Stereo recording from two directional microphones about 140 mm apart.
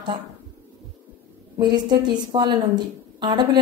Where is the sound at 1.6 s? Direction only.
30° right (ahead or behind).